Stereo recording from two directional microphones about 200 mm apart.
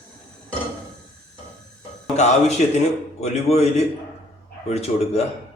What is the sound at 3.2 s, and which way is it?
Speech, 30° left (ahead or behind).